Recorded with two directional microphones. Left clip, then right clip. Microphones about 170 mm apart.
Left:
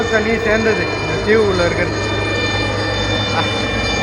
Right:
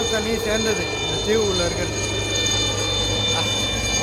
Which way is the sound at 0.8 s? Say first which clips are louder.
Left 6 dB; 45° right (ahead or behind).